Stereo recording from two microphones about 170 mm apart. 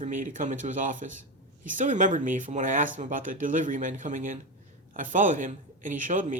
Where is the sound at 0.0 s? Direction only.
50° right (ahead or behind).